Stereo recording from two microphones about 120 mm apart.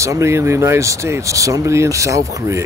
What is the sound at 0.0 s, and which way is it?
Speech, 25° right (ahead or behind).